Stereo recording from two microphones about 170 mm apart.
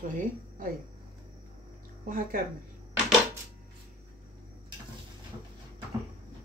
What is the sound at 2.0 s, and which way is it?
Speech, 55° right (ahead or behind).